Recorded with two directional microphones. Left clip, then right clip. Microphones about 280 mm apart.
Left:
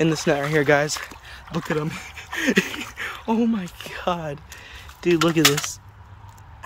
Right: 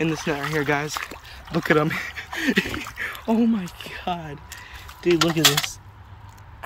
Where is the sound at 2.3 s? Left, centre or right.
Centre.